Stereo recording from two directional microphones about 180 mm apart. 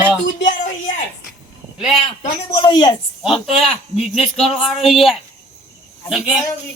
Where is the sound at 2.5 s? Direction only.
25° left (ahead or behind).